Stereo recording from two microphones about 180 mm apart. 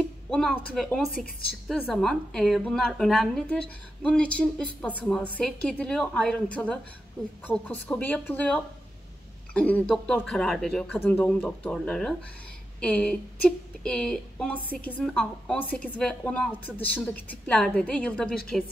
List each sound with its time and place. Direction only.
0.3 s a sound: centre (ahead or behind)
0.7 s a woman's voice: 5° left (ahead or behind)
1.1 s a woman's voice: 55° left (ahead or behind)
1.7 s a woman's voice: centre (ahead or behind)